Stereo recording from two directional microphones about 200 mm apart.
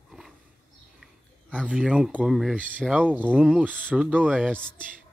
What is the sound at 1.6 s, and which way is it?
Speech, 5° right (ahead or behind).